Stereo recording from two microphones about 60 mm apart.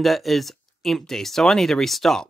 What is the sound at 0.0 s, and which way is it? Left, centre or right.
Speech, centre.